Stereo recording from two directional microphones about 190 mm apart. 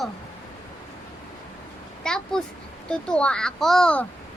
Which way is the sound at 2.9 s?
5° left (ahead or behind).